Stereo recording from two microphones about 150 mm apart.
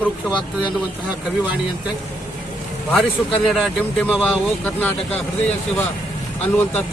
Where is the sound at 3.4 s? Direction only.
Centre (ahead or behind).